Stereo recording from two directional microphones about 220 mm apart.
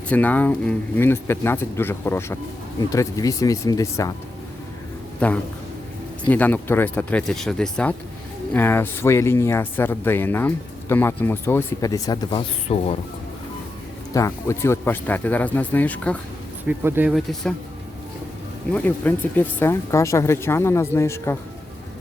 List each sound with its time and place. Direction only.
0.1 s speech: 5° left (ahead or behind)
5.2 s speech: 5° left (ahead or behind); by 13.0 s 25° left (ahead or behind)
14.1 s speech: 15° left (ahead or behind)
16.6 s speech: 10° right (ahead or behind)
18.7 s speech: 5° left (ahead or behind)